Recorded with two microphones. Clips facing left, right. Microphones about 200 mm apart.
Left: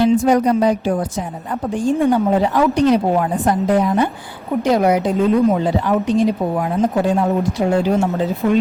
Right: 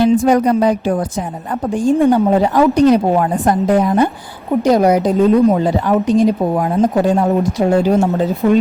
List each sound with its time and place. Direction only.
0.3 s a woman's voice: 55° right (ahead or behind)
1.7 s a woman's voice: 40° right (ahead or behind)